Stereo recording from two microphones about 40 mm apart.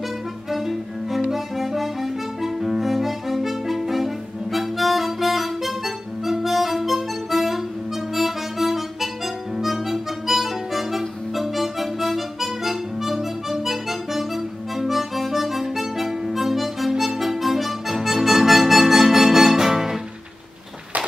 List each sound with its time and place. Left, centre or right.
0.5 s music: centre
8.1 s harmonica: centre